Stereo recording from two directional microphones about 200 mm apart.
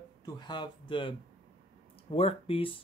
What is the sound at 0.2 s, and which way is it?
Speech, 20° left (ahead or behind).